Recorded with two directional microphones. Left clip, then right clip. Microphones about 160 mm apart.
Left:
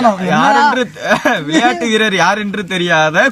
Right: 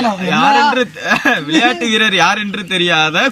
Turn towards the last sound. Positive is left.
turn(degrees=25)  # may be behind; listen again after turning